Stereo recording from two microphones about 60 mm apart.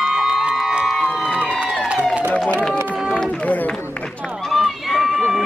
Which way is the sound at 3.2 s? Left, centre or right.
Centre.